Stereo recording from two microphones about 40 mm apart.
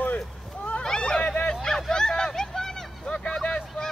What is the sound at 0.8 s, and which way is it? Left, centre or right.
Speech, left.